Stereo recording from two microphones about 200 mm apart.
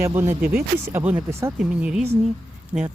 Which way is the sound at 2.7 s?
20° right (ahead or behind).